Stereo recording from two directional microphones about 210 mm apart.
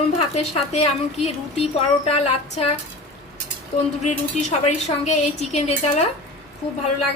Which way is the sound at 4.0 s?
30° left (ahead or behind).